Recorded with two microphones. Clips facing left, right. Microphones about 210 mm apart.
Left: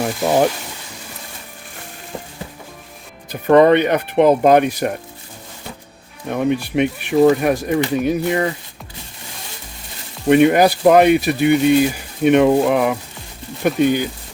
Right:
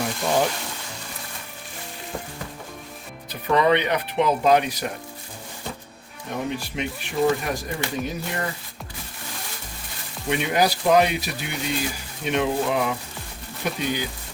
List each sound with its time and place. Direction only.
3.4 s speech: 50° left (ahead or behind)
6.2 s speech: 60° left (ahead or behind)
10.2 s speech: 55° left (ahead or behind)